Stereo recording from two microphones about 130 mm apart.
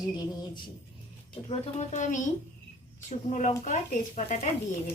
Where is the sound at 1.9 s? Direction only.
70° left (ahead or behind).